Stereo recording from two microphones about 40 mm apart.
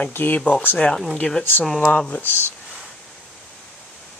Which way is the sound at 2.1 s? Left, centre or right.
Left.